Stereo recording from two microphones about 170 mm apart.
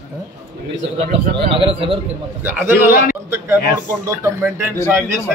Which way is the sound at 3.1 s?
15° right (ahead or behind).